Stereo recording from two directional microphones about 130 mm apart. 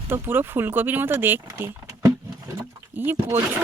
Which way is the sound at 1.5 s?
25° right (ahead or behind).